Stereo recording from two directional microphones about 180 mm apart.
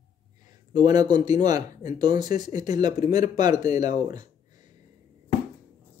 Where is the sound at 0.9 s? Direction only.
20° right (ahead or behind).